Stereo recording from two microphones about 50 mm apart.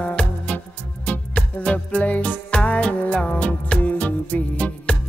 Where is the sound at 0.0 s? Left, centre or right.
Left.